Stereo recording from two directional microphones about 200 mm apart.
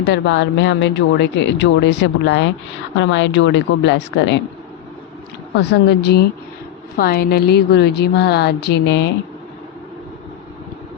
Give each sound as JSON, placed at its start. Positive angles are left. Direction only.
{"t": 0.1, "sound": "speech", "side_deg": 60}
{"t": 5.5, "sound": "a woman's voice", "side_deg": 55}